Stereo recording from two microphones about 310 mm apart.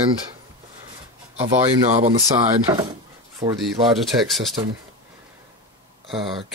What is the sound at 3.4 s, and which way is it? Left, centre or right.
Speech, centre.